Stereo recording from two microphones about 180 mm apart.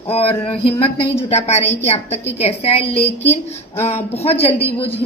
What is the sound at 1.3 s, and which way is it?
A woman's voice, 35° left (ahead or behind).